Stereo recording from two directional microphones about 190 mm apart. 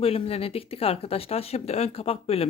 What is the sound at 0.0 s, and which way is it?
Speech, 30° left (ahead or behind).